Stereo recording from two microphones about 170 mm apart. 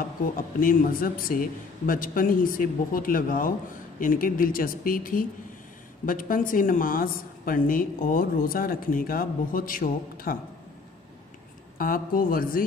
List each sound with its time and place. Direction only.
0.4 s a woman's voice: 55° left (ahead or behind)
11.8 s a woman's voice: 55° left (ahead or behind)